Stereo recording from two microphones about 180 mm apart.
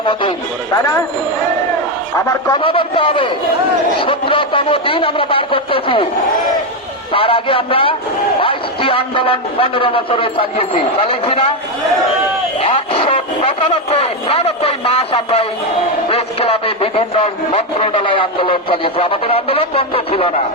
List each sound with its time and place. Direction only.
0.0 s a man's voice: 30° left (ahead or behind)
2.1 s a man's voice: 25° left (ahead or behind)
7.1 s a man's voice: 30° left (ahead or behind)
12.6 s a man's voice: 30° left (ahead or behind)